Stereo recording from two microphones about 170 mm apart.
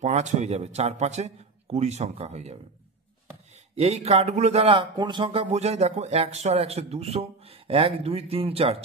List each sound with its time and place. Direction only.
0.0 s speech: 40° right (ahead or behind)
3.7 s speech: 40° right (ahead or behind)